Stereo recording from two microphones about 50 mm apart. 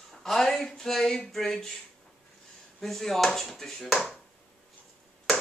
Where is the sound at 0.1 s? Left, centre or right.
Centre.